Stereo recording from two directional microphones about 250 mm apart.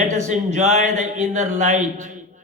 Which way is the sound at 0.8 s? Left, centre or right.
Right.